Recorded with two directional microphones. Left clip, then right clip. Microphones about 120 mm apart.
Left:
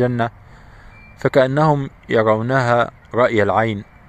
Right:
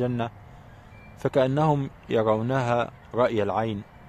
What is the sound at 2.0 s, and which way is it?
A man's voice, 30° left (ahead or behind).